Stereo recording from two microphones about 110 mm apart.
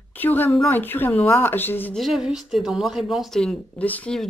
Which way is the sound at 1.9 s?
Centre (ahead or behind).